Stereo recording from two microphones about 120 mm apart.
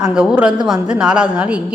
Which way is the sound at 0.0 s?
5° right (ahead or behind).